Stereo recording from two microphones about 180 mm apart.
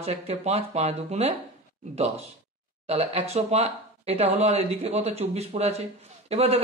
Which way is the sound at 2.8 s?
35° right (ahead or behind).